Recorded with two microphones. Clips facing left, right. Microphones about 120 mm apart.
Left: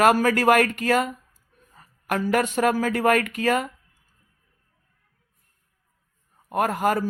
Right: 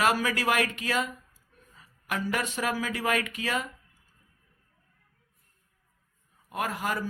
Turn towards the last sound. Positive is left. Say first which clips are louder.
# left 9 dB
turn(degrees=50)  # may be behind; listen again after turning